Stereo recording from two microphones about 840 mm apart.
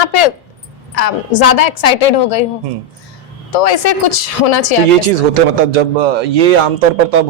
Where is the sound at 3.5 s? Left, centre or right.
Left.